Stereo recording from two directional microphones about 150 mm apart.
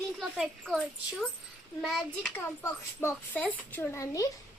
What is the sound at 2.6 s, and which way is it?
A child's voice, 15° left (ahead or behind).